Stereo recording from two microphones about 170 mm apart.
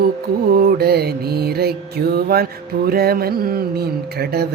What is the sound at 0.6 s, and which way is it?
Mantra, 65° right (ahead or behind).